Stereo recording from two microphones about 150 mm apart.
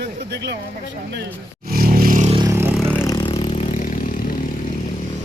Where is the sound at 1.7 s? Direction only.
80° right.